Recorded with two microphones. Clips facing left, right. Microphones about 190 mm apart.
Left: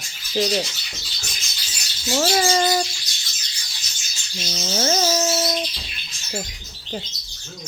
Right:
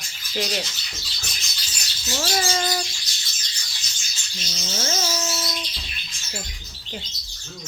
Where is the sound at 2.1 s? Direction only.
45° left (ahead or behind).